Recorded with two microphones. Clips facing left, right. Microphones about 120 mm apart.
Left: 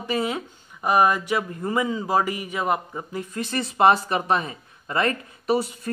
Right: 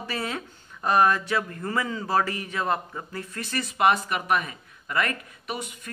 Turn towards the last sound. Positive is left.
turn(degrees=35)  # may be behind; listen again after turning